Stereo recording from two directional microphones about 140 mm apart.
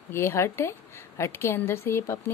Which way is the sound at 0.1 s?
20° left (ahead or behind).